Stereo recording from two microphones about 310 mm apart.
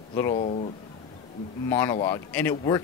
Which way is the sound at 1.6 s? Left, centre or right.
Centre.